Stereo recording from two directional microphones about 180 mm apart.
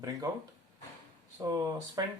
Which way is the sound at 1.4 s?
20° right (ahead or behind).